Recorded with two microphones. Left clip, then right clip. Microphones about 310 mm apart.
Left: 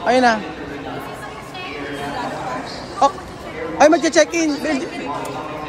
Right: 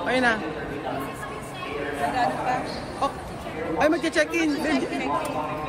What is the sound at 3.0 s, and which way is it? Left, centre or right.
Speech, left.